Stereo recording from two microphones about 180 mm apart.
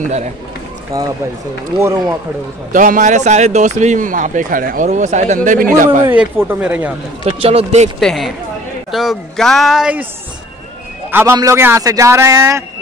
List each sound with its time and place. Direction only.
0.0 s speech: 40° right (ahead or behind)
1.8 s a man's voice: 15° right (ahead or behind)
2.7 s a man's voice: 45° right (ahead or behind)
6.0 s a man's voice: 10° right (ahead or behind)
7.2 s speech: 35° right (ahead or behind)
8.0 s speech: 5° left (ahead or behind)
11.1 s a man's voice: 15° right (ahead or behind)